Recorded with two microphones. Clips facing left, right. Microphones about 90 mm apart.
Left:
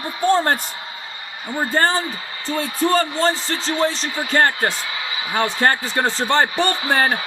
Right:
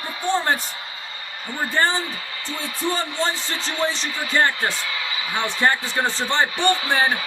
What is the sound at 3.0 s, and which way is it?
Speech, 35° left (ahead or behind).